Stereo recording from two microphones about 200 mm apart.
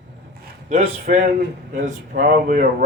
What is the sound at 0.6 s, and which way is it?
Speech, 40° right (ahead or behind).